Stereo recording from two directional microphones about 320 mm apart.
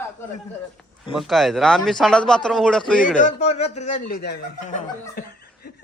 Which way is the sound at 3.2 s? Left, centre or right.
Left.